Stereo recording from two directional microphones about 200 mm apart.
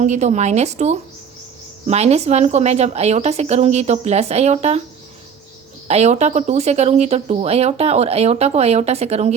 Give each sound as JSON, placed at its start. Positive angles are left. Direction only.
{"t": 0.0, "sound": "speech", "side_deg": -35}
{"t": 5.9, "sound": "speech", "side_deg": -35}